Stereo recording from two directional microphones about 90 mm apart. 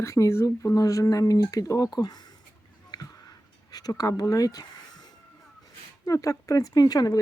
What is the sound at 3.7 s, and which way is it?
Speech, 45° left (ahead or behind).